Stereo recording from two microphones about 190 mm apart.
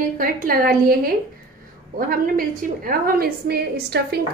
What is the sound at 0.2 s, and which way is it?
A woman's voice, 50° right (ahead or behind).